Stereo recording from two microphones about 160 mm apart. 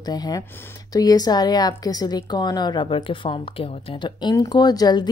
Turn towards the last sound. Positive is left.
turn(degrees=25)  # may be behind; listen again after turning